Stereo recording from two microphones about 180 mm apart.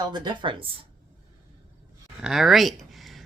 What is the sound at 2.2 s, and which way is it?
Speech, centre (ahead or behind).